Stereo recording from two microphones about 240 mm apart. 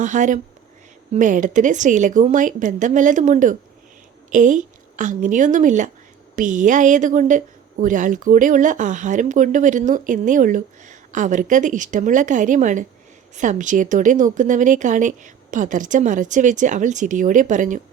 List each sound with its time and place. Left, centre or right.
0.0 s a woman's voice: right